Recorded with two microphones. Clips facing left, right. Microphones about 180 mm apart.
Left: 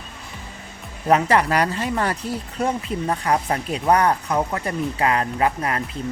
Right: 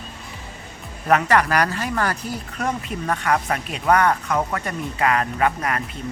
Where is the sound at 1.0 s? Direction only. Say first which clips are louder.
Left 1 dB; 30° left (ahead or behind).